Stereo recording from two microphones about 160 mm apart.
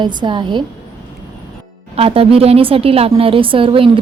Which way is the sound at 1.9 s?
35° right (ahead or behind).